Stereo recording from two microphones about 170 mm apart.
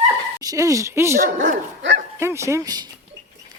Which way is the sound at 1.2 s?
50° right (ahead or behind).